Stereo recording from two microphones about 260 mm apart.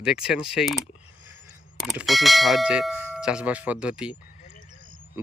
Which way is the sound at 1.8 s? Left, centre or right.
Centre.